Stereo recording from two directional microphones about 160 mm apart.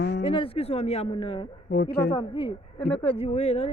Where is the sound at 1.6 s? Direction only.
90° left.